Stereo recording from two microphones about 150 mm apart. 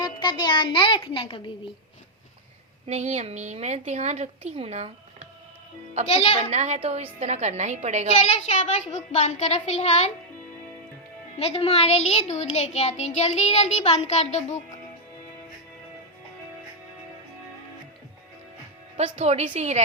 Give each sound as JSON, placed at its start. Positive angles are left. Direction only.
{"t": 0.0, "sound": "a child's voice", "side_deg": 30}
{"t": 2.8, "sound": "a woman's voice", "side_deg": -50}
{"t": 6.5, "sound": "a woman's voice", "side_deg": -50}
{"t": 8.2, "sound": "a child's voice", "side_deg": 50}
{"t": 11.3, "sound": "a child's voice", "side_deg": 40}
{"t": 18.9, "sound": "a woman's voice", "side_deg": -45}